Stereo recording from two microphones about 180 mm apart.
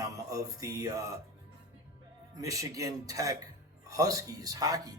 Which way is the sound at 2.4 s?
20° right (ahead or behind).